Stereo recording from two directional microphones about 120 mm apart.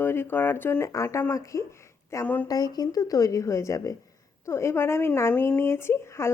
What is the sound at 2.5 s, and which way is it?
A woman's voice, 35° left (ahead or behind).